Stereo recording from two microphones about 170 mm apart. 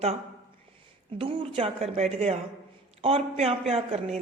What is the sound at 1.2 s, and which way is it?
Speech, 35° right (ahead or behind).